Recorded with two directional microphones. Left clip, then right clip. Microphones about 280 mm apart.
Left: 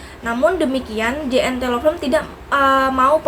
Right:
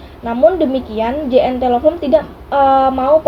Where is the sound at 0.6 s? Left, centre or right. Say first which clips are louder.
Right 4 dB; left.